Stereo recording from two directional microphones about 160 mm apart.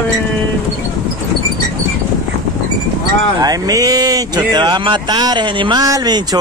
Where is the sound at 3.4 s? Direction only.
25° right (ahead or behind).